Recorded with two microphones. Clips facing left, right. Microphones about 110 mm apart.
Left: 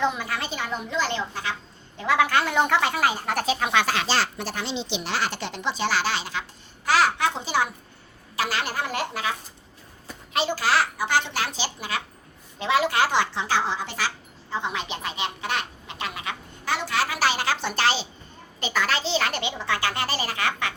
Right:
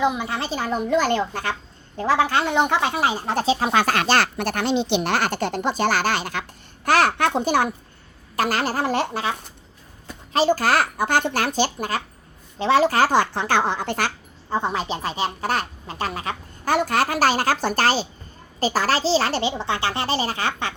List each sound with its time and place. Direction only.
0.0 s a woman's voice: 15° right (ahead or behind)
0.3 s speech: 30° right (ahead or behind); by 1.5 s 50° right (ahead or behind)
2.0 s a child's voice: 30° right (ahead or behind)
10.3 s speech: 40° right (ahead or behind)
14.5 s a child's voice: 40° right (ahead or behind)